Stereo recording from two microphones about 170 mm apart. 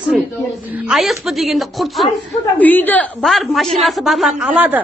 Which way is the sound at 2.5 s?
10° left (ahead or behind).